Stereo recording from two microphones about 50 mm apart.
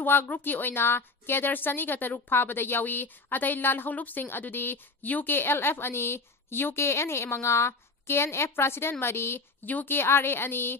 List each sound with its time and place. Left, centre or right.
0.0 s a woman's voice: left